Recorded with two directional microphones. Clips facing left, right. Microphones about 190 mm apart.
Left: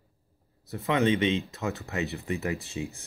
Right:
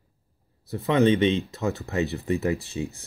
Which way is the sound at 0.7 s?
35° right (ahead or behind).